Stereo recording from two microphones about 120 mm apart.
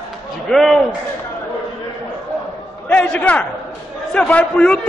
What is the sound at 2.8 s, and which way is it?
A man's voice, 10° left (ahead or behind).